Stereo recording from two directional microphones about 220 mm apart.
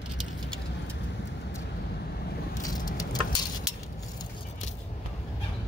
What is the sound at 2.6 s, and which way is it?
Vehicle, 15° left (ahead or behind).